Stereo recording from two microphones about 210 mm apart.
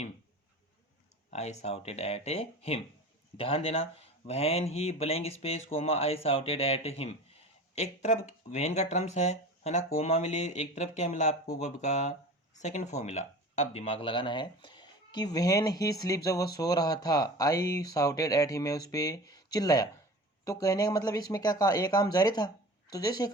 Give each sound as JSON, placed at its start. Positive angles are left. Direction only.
{"t": 1.3, "sound": "speech", "side_deg": 30}